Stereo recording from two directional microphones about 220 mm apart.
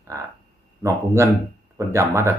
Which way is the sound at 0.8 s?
15° right (ahead or behind).